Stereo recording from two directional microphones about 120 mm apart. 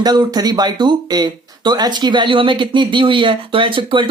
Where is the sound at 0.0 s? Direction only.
35° right (ahead or behind).